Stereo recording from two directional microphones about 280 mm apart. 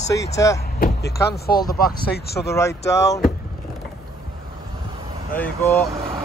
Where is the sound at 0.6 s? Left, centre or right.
Left.